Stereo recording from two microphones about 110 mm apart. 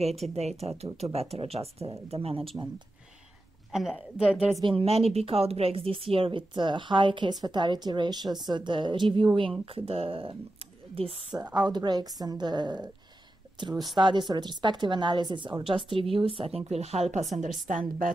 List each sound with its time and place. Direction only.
0.3 s speech: 75° right (ahead or behind); by 2.5 s 60° right (ahead or behind)
3.7 s a woman's voice: 5° right (ahead or behind)
4.6 s a woman's voice: 60° right (ahead or behind)
11.5 s a woman's voice: 40° right (ahead or behind); by 17.2 s 75° right (ahead or behind)
17.2 s a woman's voice: centre (ahead or behind)